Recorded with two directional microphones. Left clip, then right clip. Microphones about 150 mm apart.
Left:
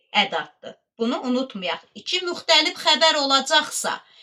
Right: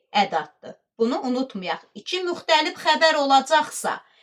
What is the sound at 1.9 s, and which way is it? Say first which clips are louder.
Speech: left 1 dB; 45° right (ahead or behind).